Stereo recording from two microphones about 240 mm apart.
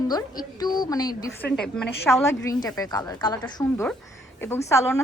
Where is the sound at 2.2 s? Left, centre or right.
Centre.